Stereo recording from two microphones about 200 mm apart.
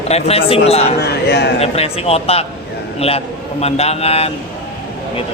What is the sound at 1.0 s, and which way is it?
Speech, 55° left (ahead or behind).